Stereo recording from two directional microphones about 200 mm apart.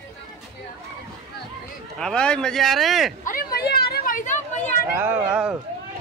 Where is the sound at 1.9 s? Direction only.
5° left (ahead or behind).